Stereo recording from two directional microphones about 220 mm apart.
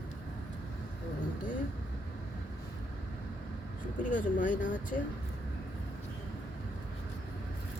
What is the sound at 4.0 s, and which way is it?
Speech, 35° left (ahead or behind).